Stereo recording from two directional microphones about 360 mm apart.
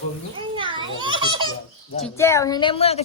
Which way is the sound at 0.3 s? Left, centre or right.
Centre.